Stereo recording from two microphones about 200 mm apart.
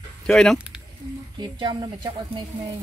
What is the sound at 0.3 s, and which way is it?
Speech, centre (ahead or behind).